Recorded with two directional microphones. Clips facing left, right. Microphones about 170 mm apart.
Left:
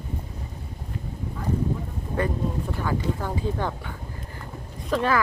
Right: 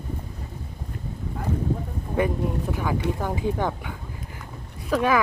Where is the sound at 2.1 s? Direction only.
15° right (ahead or behind).